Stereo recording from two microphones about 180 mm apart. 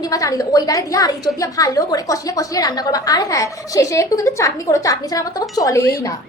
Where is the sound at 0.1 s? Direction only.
20° left (ahead or behind).